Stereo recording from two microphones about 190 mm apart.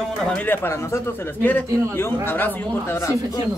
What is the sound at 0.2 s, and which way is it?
A man's voice, 5° left (ahead or behind).